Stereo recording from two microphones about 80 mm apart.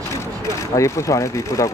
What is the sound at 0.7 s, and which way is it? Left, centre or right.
Speech, left.